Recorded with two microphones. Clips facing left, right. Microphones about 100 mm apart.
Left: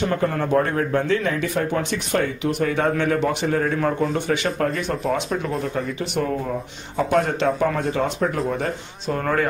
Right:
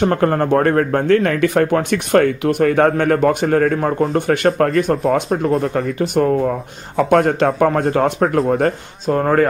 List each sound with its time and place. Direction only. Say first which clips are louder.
0.0 s speech: right 6 dB; 55° right (ahead or behind)